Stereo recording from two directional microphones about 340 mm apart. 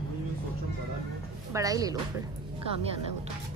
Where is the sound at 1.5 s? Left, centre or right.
Centre.